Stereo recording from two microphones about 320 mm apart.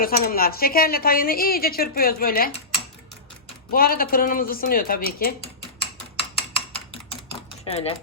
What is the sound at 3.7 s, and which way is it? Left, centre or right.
A woman's voice, left.